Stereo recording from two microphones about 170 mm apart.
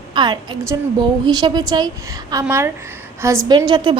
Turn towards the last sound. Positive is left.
turn(degrees=-25)  # may be behind; listen again after turning